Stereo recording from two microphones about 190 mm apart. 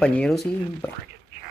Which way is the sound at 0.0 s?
5° left (ahead or behind).